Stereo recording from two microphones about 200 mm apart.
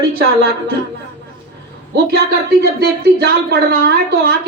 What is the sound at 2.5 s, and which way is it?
A woman's voice, 50° right (ahead or behind).